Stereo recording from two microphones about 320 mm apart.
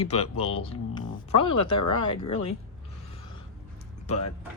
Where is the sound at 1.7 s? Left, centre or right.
Left.